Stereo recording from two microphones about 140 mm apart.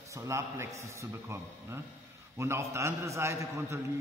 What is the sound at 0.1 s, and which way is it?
A man's voice, 20° right (ahead or behind).